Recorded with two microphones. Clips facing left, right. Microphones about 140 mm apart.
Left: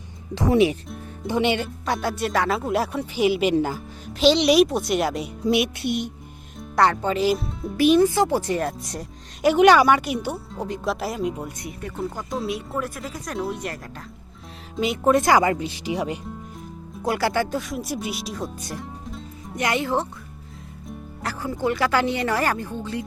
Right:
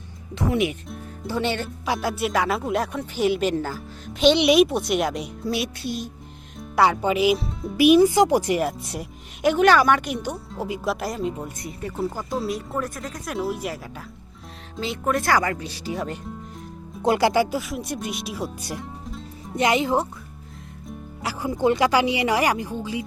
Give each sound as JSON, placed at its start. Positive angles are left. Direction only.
{"t": 0.3, "sound": "speech", "side_deg": 30}
{"t": 0.9, "sound": "music", "side_deg": 0}
{"t": 1.3, "sound": "speech", "side_deg": 15}
{"t": 1.8, "sound": "speech", "side_deg": 0}
{"t": 4.0, "sound": "speech", "side_deg": 0}
{"t": 5.5, "sound": "music", "side_deg": 20}
{"t": 5.8, "sound": "speech", "side_deg": 70}
{"t": 6.6, "sound": "speech", "side_deg": -5}
{"t": 7.8, "sound": "speech", "side_deg": -10}
{"t": 9.5, "sound": "speech", "side_deg": 15}
{"t": 14.8, "sound": "speech", "side_deg": 20}
{"t": 17.0, "sound": "speech", "side_deg": -20}
{"t": 19.5, "sound": "speech", "side_deg": -20}